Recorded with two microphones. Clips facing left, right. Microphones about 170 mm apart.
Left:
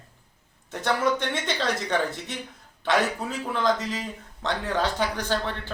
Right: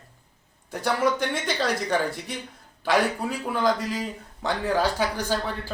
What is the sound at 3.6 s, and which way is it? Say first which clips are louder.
Speech: right 1 dB; 5° right (ahead or behind).